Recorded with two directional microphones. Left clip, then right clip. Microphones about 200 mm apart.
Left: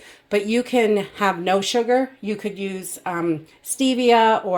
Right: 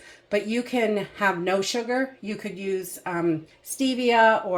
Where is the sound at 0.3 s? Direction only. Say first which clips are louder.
Left 5 dB; 40° left (ahead or behind).